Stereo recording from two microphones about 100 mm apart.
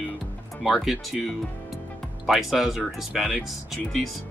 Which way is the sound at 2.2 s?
Centre (ahead or behind).